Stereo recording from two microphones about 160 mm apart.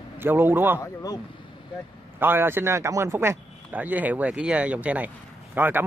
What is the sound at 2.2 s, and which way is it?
Speech, 15° right (ahead or behind).